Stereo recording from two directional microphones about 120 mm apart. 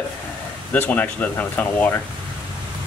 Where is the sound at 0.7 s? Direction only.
15° left (ahead or behind).